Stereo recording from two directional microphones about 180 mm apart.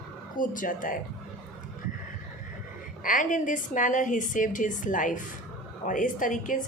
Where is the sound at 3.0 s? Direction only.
45° left (ahead or behind).